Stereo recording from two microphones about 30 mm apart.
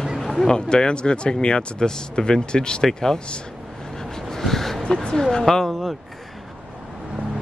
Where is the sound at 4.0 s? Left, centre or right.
Centre.